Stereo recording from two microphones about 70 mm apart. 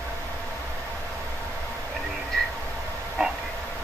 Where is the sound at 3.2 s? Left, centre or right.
Centre.